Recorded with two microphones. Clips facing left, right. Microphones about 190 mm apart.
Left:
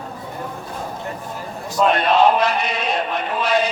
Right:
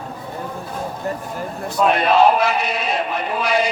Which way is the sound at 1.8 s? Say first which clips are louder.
Right 1 dB; 5° right (ahead or behind).